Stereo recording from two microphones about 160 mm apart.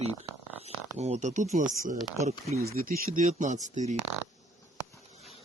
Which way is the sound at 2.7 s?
65° right (ahead or behind).